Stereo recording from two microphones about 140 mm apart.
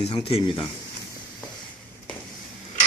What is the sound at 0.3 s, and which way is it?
Speech, 40° left (ahead or behind).